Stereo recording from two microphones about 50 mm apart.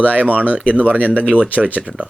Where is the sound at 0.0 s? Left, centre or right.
Right.